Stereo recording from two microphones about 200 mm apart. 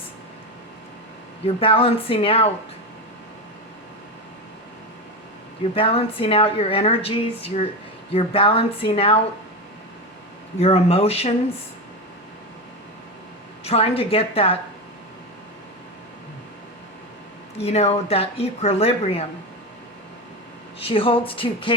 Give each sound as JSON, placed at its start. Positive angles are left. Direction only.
{"t": 1.5, "sound": "a woman's voice", "side_deg": 30}
{"t": 5.7, "sound": "a woman's voice", "side_deg": 30}
{"t": 10.6, "sound": "a woman's voice", "side_deg": 30}
{"t": 13.7, "sound": "a woman's voice", "side_deg": 30}
{"t": 17.6, "sound": "speech", "side_deg": 30}
{"t": 20.7, "sound": "a woman's voice", "side_deg": 30}